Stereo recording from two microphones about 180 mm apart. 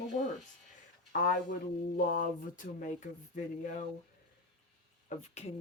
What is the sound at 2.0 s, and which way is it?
Speech, 50° left (ahead or behind).